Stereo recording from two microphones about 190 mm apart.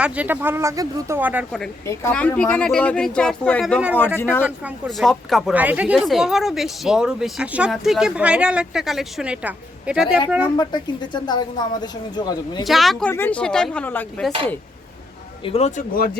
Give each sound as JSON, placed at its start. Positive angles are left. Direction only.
{"t": 0.0, "sound": "speech", "side_deg": -10}
{"t": 1.9, "sound": "speech", "side_deg": 10}
{"t": 4.4, "sound": "speech", "side_deg": -5}
{"t": 10.6, "sound": "speech", "side_deg": 25}
{"t": 12.6, "sound": "speech", "side_deg": 0}
{"t": 15.4, "sound": "speech", "side_deg": 35}